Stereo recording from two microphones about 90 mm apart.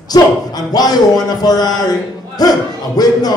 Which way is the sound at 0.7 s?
45° left (ahead or behind).